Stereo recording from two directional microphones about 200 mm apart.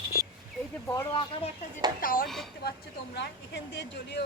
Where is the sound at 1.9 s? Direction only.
45° left (ahead or behind).